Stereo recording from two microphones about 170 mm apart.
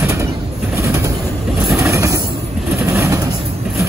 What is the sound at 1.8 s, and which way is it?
Vehicle, 15° right (ahead or behind).